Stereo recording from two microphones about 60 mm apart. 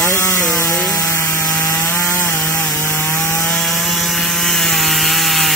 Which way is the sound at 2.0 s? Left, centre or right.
Left.